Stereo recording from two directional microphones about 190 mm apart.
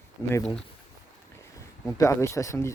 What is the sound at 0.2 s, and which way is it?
Speech, 15° left (ahead or behind).